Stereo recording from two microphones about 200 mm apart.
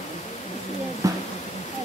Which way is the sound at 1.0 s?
15° right (ahead or behind).